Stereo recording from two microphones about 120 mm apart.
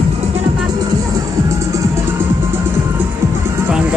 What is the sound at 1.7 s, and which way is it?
Music, 25° right (ahead or behind).